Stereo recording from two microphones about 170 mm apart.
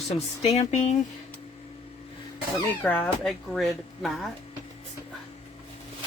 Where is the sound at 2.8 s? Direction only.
5° left (ahead or behind).